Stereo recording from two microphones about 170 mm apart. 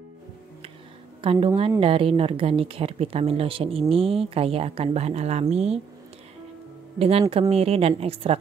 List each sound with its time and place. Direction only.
1.2 s speech: 30° right (ahead or behind)
7.0 s speech: 35° right (ahead or behind)